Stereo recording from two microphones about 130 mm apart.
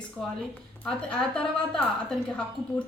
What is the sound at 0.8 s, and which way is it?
A woman's voice, 5° left (ahead or behind).